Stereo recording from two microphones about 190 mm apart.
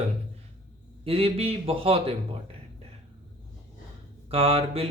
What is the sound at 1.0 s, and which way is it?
Speech, 30° right (ahead or behind).